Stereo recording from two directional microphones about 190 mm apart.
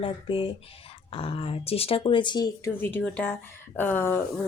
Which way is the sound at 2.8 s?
10° left (ahead or behind).